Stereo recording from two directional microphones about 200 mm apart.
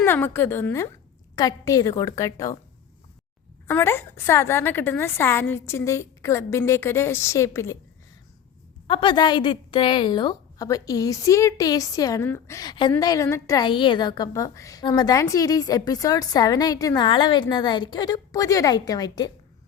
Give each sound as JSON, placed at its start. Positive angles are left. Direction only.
{"t": 0.0, "sound": "a woman's voice", "side_deg": 10}
{"t": 3.7, "sound": "a woman's voice", "side_deg": 10}
{"t": 8.9, "sound": "a woman's voice", "side_deg": 25}